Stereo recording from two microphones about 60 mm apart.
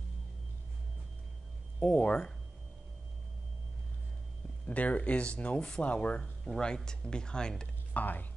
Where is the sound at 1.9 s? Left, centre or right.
Left.